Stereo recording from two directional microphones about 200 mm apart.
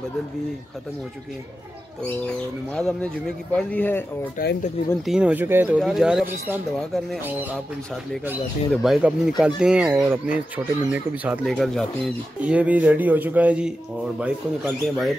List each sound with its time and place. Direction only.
2.3 s speech: 5° left (ahead or behind)
4.4 s speech: 45° left (ahead or behind)
5.0 s speech: 5° right (ahead or behind)